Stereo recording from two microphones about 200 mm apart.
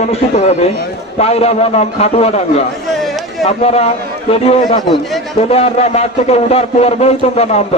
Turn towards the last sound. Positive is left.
turn(degrees=30)  # may be behind; listen again after turning